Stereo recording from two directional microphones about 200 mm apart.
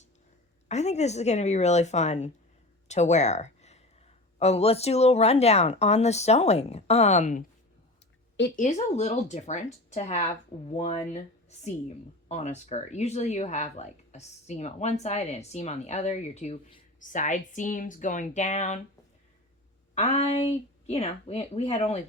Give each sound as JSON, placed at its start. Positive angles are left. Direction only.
{"t": 0.7, "sound": "speech", "side_deg": 35}
{"t": 8.5, "sound": "speech", "side_deg": 35}
{"t": 12.3, "sound": "speech", "side_deg": 35}
{"t": 19.9, "sound": "speech", "side_deg": 30}